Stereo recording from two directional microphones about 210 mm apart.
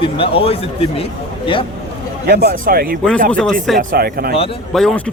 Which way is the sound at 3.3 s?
5° left (ahead or behind).